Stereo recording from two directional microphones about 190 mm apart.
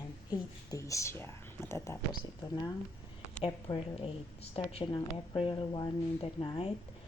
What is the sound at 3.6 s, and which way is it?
A woman's voice, 30° left (ahead or behind).